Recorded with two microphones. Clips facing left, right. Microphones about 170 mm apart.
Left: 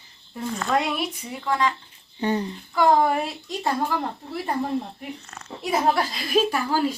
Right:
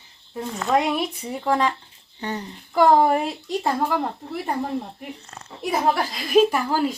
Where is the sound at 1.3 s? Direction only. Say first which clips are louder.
Right 3 dB; 35° right (ahead or behind).